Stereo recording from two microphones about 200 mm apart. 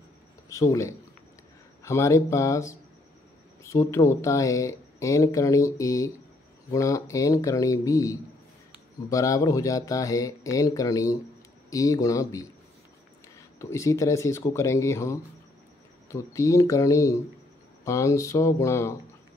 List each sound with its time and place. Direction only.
0.5 s speech: 15° left (ahead or behind)
13.6 s speech: 15° left (ahead or behind)